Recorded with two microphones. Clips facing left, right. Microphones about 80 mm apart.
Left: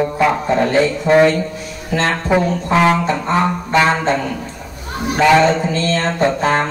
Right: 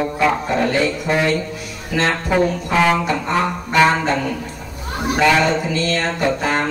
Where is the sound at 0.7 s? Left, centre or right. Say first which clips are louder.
Left 5 dB; left.